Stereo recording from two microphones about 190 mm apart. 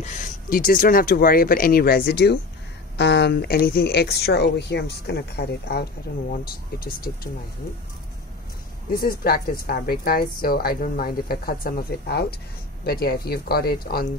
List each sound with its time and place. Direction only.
0.0 s a woman's voice: 40° left (ahead or behind)
8.9 s a woman's voice: 55° left (ahead or behind)